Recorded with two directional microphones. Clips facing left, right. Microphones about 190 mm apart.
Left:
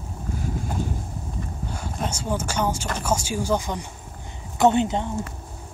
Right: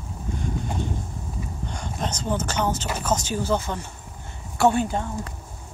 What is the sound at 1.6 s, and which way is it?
Speech, 5° left (ahead or behind).